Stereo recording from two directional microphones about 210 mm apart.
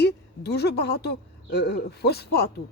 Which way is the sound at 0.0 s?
50° left (ahead or behind).